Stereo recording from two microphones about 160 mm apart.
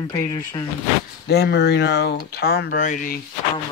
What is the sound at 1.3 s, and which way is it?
Speech, 90° left.